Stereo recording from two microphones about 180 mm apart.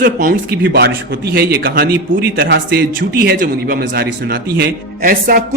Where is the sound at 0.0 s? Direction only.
55° right (ahead or behind).